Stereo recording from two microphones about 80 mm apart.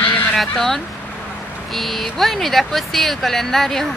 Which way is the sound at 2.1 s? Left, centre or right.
Centre.